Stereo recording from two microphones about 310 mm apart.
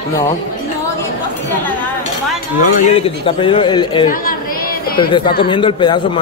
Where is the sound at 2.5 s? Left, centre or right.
Centre.